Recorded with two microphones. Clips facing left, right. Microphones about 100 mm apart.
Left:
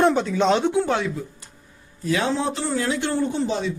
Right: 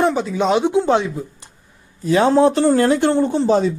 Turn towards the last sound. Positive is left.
turn(degrees=-40)  # may be behind; listen again after turning